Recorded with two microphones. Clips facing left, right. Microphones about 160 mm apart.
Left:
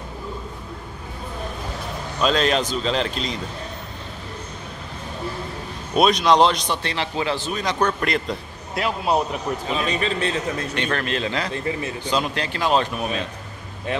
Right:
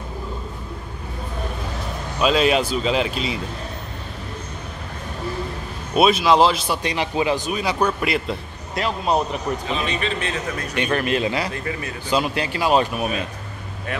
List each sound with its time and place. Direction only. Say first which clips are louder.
2.1 s speech: right 2 dB; 5° right (ahead or behind)
5.9 s a man's voice: right 1 dB; 5° right (ahead or behind)
9.8 s a man's voice: left 2 dB; 35° left (ahead or behind)
10.7 s speech: right 7 dB; 10° right (ahead or behind)
11.5 s a man's voice: left 2 dB; 25° left (ahead or behind)
12.1 s speech: right 3 dB; 5° right (ahead or behind)